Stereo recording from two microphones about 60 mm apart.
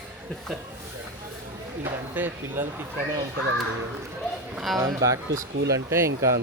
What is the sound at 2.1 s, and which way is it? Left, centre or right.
Speech, right.